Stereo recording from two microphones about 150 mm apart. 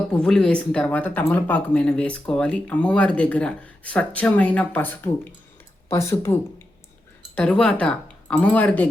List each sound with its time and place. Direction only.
0.1 s speech: 5° left (ahead or behind)
7.3 s speech: 5° left (ahead or behind)